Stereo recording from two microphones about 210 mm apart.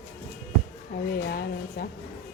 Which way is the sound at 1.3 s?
45° left (ahead or behind).